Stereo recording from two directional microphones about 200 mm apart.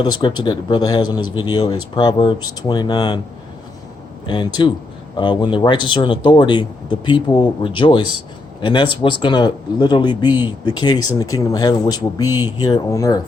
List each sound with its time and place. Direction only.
0.0 s a man's voice: 25° left (ahead or behind)
4.3 s a man's voice: 25° left (ahead or behind)
12.3 s speech: 10° right (ahead or behind)
12.5 s a man's voice: 20° left (ahead or behind)